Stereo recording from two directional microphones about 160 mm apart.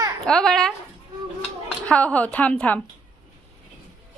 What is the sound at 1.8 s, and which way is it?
Speech, 10° left (ahead or behind).